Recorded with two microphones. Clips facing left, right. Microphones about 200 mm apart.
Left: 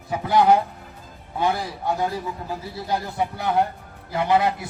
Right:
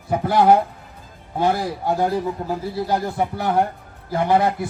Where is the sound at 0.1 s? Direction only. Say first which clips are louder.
Right 2 dB; 50° right (ahead or behind).